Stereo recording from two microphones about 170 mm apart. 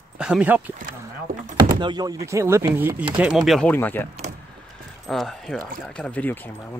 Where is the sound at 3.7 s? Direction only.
10° left (ahead or behind).